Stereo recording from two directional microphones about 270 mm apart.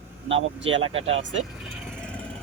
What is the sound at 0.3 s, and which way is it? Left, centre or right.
Speech, right.